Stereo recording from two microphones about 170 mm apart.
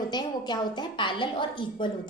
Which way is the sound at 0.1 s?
25° left (ahead or behind).